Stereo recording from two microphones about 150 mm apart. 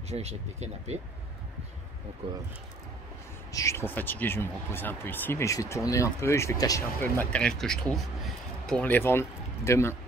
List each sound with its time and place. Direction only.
0.1 s speech: 45° right (ahead or behind)
2.2 s speech: 35° right (ahead or behind)
3.5 s speech: 20° left (ahead or behind)
7.0 s speech: 10° left (ahead or behind)